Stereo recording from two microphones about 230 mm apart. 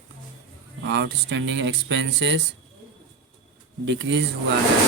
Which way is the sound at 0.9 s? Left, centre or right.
Right.